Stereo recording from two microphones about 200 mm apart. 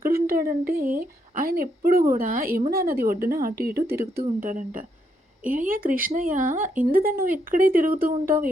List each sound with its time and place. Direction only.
0.0 s a woman's voice: 45° right (ahead or behind)